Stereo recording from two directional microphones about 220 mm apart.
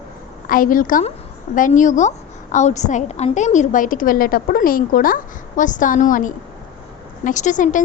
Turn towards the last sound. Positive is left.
turn(degrees=35)  # may be behind; listen again after turning